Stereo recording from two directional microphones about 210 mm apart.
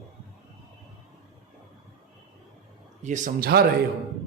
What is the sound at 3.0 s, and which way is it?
Speech, 35° right (ahead or behind).